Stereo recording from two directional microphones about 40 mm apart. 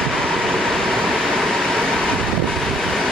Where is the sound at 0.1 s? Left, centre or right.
Centre.